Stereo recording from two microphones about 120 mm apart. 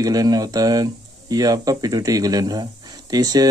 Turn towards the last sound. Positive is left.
turn(degrees=-35)  # may be behind; listen again after turning